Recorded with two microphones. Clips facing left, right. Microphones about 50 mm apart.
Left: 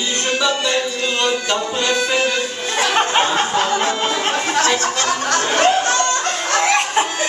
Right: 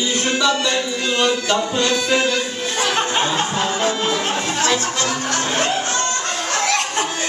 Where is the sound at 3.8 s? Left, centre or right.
Left.